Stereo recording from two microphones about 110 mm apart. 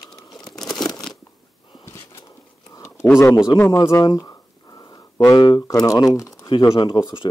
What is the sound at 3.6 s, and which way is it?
Speech, 25° left (ahead or behind).